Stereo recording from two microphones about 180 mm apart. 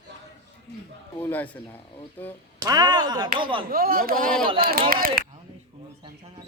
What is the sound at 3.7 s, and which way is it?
Speech, 55° right (ahead or behind).